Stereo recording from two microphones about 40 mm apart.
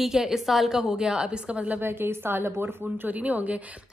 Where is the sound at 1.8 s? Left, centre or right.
Right.